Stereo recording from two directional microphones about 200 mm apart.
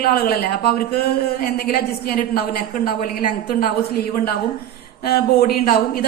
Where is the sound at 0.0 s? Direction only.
45° left (ahead or behind).